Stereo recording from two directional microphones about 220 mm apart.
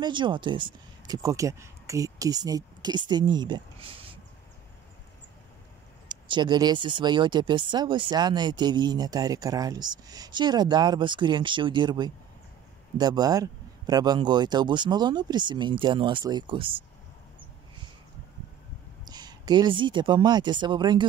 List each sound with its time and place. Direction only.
0.0 s speech: 20° right (ahead or behind)
6.0 s speech: 20° right (ahead or behind)
19.0 s speech: 20° right (ahead or behind)